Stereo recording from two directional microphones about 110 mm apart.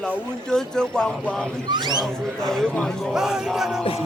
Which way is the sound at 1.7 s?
40° right (ahead or behind).